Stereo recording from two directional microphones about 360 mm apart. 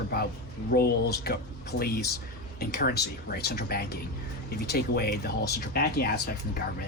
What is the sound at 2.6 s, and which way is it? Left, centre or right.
Speech, left.